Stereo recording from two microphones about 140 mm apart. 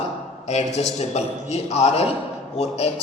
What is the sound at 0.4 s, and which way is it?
A man's voice, 55° left (ahead or behind).